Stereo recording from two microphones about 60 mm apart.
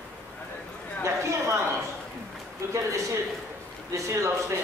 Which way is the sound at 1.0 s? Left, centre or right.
Right.